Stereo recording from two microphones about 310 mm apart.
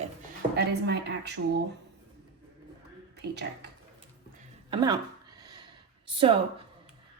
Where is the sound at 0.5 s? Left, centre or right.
Right.